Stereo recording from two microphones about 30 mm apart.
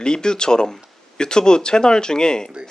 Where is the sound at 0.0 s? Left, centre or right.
Left.